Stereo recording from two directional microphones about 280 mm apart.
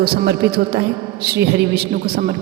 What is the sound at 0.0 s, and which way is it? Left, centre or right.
A woman's voice, right.